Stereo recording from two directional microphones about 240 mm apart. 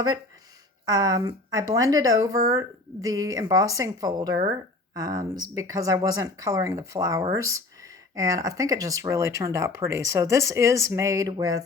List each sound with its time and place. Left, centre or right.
0.9 s speech: centre